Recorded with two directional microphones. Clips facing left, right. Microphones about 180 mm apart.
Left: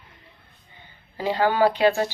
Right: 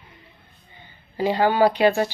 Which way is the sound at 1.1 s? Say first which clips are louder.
Right 2 dB; 15° right (ahead or behind).